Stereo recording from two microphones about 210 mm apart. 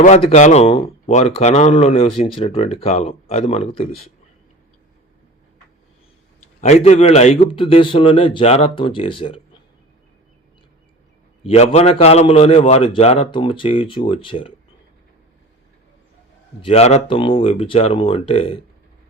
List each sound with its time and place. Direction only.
0.0 s a man's voice: 30° left (ahead or behind)
6.6 s a man's voice: 30° left (ahead or behind)
11.5 s a man's voice: 30° left (ahead or behind)
16.6 s a man's voice: 25° left (ahead or behind)